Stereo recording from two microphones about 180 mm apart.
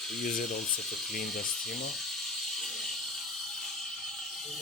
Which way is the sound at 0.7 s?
55° left (ahead or behind).